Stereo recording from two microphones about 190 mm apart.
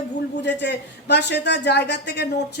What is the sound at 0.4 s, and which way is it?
Speech, 65° left (ahead or behind).